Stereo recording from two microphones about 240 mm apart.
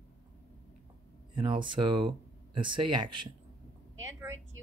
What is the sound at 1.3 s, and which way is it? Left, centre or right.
Speech, centre.